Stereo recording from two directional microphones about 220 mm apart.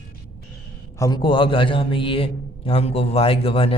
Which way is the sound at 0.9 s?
15° left (ahead or behind).